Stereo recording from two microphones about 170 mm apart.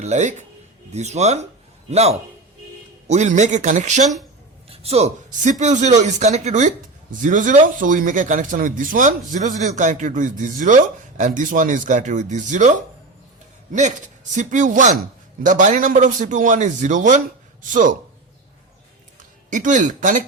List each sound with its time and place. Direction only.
0.0 s speech: 45° right (ahead or behind)
13.7 s speech: 45° right (ahead or behind)
19.5 s speech: 45° right (ahead or behind)